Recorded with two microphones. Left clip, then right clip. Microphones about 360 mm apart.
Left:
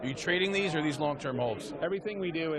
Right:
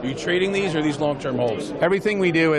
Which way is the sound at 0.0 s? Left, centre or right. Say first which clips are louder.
Right 8 dB; left.